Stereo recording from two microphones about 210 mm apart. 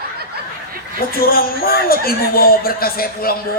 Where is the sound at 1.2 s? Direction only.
45° left (ahead or behind).